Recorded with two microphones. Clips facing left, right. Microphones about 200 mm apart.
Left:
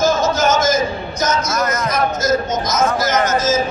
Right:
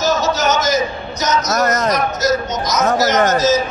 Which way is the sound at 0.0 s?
50° left (ahead or behind).